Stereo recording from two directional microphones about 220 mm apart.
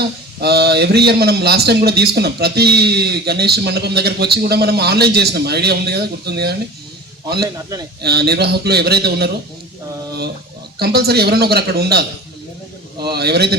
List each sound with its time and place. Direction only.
0.3 s a man's voice: 45° right (ahead or behind)
8.0 s a man's voice: 45° right (ahead or behind)
10.8 s a man's voice: 45° right (ahead or behind)